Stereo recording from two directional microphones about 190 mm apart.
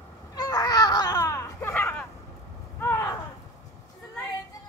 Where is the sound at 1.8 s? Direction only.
10° left (ahead or behind).